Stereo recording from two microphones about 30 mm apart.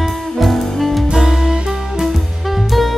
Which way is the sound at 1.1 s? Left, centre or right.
Centre.